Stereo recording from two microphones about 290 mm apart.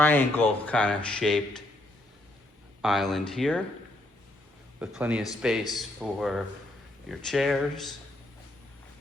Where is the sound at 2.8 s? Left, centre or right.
Centre.